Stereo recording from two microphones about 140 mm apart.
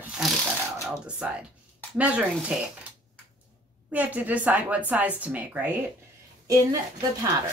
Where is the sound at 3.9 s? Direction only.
10° right (ahead or behind).